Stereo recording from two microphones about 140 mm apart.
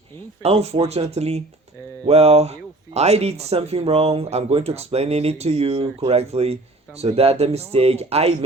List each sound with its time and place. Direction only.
0.4 s speech: 45° right (ahead or behind)